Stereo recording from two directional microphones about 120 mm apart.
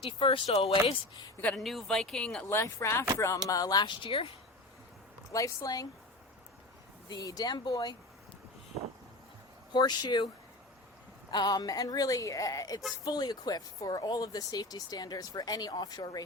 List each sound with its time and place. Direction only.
0.2 s speech: 45° left (ahead or behind)
0.4 s speech: 65° left (ahead or behind)
1.5 s speech: centre (ahead or behind)
2.5 s speech: 25° left (ahead or behind); by 4.3 s 45° left (ahead or behind)
5.3 s speech: 30° left (ahead or behind)
7.1 s speech: 30° left (ahead or behind)
9.7 s speech: 35° left (ahead or behind)
11.3 s speech: 35° left (ahead or behind)